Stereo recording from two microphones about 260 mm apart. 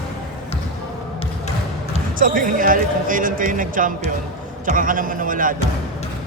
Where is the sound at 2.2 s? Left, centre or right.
Right.